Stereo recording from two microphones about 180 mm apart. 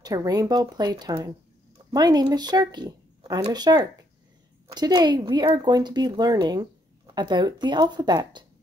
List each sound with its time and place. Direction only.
0.0 s speech: 20° right (ahead or behind)